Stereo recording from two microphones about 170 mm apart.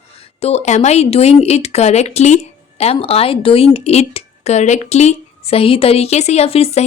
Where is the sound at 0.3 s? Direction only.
40° left (ahead or behind).